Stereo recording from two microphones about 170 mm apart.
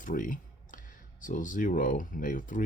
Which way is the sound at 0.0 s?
50° left (ahead or behind).